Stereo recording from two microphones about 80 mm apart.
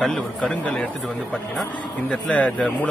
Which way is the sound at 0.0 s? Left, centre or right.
Centre.